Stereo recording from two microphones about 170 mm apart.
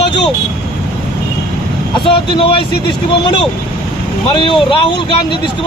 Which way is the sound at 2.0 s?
30° left (ahead or behind).